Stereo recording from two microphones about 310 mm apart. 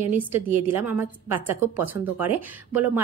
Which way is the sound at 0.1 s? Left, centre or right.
Centre.